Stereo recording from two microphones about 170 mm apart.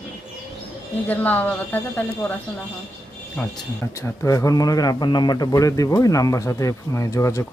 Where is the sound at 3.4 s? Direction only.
10° left (ahead or behind).